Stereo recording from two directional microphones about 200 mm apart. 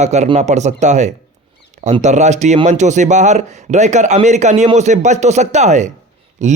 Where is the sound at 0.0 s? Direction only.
35° right (ahead or behind).